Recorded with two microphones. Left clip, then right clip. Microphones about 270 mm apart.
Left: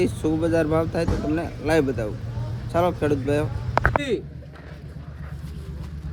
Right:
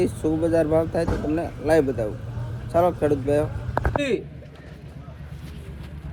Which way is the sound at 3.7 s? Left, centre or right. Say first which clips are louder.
Left 5 dB; right.